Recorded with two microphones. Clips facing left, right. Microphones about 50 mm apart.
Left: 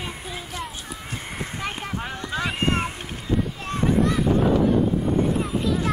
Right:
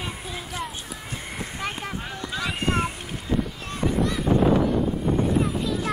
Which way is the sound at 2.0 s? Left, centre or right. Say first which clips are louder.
Left 3 dB; left.